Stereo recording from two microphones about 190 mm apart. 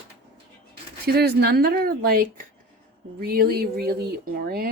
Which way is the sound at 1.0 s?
55° right (ahead or behind).